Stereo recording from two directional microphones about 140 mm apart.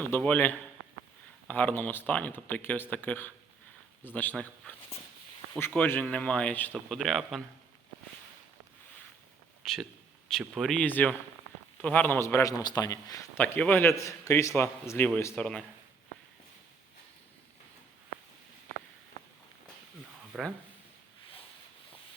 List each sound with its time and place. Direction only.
0.0 s a man's voice: 10° left (ahead or behind)
6.7 s speech: centre (ahead or behind)
9.6 s a man's voice: centre (ahead or behind); by 13.4 s 25° left (ahead or behind)
13.4 s a man's voice: 10° left (ahead or behind)
20.3 s speech: 5° right (ahead or behind)